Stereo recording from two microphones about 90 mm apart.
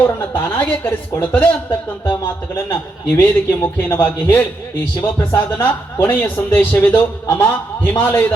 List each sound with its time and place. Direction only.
0.0 s a man's voice: 25° left (ahead or behind)